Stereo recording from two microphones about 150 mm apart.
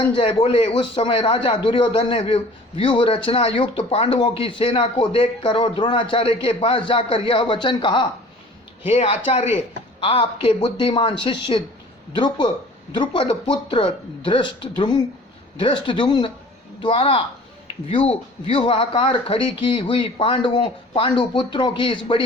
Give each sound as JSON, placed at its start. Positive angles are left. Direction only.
{"t": 0.2, "sound": "speech", "side_deg": 40}